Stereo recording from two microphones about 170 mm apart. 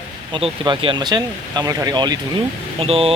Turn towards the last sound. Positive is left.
turn(degrees=-35)  # may be behind; listen again after turning